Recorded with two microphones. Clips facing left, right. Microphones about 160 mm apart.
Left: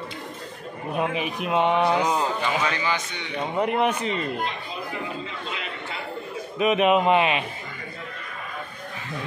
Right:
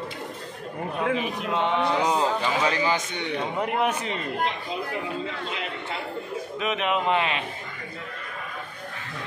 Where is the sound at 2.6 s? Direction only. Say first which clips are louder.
Right 2 dB; 35° right (ahead or behind).